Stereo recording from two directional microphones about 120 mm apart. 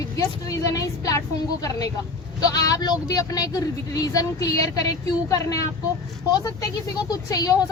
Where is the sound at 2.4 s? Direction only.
30° left (ahead or behind).